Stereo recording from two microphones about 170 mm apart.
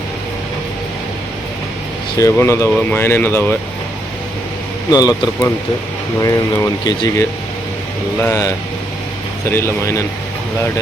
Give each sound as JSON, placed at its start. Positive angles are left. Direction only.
{"t": 2.1, "sound": "speech", "side_deg": 15}
{"t": 4.9, "sound": "speech", "side_deg": 20}
{"t": 9.5, "sound": "speech", "side_deg": 15}